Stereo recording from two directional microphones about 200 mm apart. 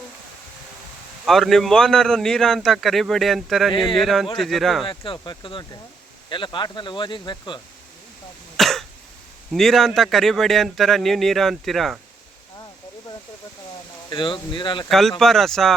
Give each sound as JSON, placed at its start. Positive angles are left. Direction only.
{"t": 1.2, "sound": "a man's voice", "side_deg": 0}
{"t": 3.7, "sound": "speech", "side_deg": 25}
{"t": 3.9, "sound": "a man's voice", "side_deg": 0}
{"t": 4.9, "sound": "speech", "side_deg": 25}
{"t": 8.5, "sound": "cough", "side_deg": 0}
{"t": 9.5, "sound": "a man's voice", "side_deg": 0}
{"t": 14.1, "sound": "speech", "side_deg": 25}
{"t": 14.8, "sound": "a man's voice", "side_deg": 0}